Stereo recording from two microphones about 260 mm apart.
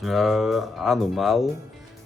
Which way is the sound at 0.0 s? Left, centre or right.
Centre.